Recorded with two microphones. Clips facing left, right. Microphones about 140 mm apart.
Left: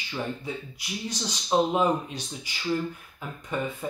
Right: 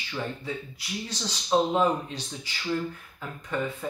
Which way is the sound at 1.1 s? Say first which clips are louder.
Even; 15° left (ahead or behind).